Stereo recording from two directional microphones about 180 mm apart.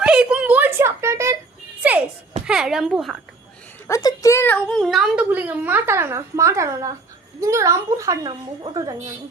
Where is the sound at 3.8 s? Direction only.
20° left (ahead or behind); by 9.0 s 25° right (ahead or behind).